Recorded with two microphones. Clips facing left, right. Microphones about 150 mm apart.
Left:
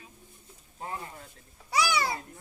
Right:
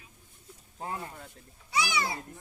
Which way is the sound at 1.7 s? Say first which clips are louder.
Left 3 dB; 20° right (ahead or behind).